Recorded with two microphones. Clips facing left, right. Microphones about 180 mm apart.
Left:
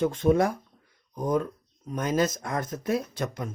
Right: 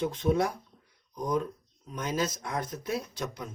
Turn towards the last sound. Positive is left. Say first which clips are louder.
# left 4 dB
turn(degrees=55)  # may be behind; listen again after turning